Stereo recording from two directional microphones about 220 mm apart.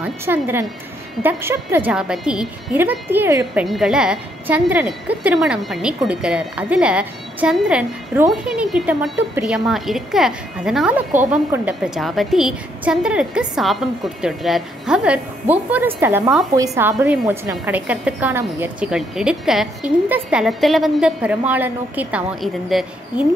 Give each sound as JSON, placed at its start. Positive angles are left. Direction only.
{"t": 0.0, "sound": "a woman's voice", "side_deg": -10}